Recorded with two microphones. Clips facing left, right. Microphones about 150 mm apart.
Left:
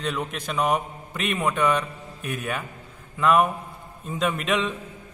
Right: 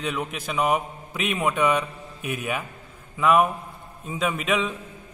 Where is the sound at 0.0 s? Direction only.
5° right (ahead or behind).